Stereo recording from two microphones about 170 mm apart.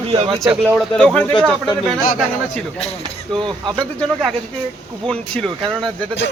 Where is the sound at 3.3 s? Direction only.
25° right (ahead or behind).